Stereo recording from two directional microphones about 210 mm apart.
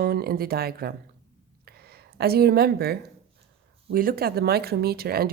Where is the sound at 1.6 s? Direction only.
50° right (ahead or behind).